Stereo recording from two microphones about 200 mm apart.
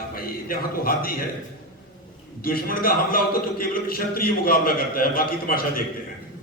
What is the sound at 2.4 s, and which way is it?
A man's voice, 50° left (ahead or behind).